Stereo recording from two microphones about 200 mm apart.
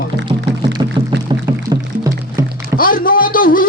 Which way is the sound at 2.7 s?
45° left (ahead or behind).